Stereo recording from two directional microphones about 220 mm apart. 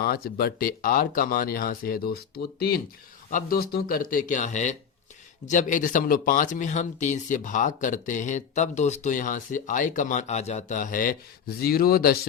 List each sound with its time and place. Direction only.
0.0 s speech: 45° left (ahead or behind)